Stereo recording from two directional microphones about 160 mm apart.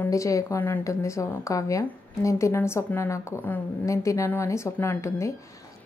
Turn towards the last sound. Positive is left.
turn(degrees=20)  # may be behind; listen again after turning